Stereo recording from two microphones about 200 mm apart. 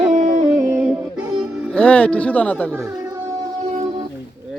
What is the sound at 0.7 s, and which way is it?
Music, 5° right (ahead or behind).